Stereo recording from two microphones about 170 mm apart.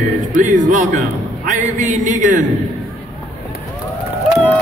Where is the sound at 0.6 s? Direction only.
50° right (ahead or behind).